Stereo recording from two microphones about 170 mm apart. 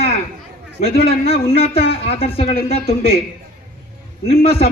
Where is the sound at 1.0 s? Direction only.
35° left (ahead or behind).